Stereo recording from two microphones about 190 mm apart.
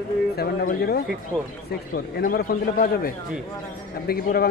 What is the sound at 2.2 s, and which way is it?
A man's voice, 50° left (ahead or behind).